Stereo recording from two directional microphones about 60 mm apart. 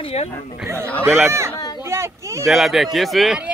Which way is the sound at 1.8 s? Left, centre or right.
Right.